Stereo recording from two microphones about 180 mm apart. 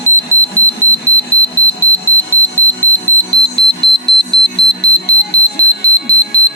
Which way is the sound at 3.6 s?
30° left (ahead or behind).